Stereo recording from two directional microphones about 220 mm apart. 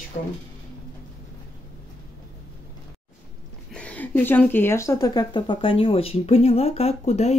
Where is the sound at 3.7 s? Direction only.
5° left (ahead or behind).